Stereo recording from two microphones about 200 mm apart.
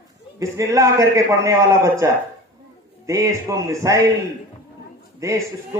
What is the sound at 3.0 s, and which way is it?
Speech, 15° right (ahead or behind).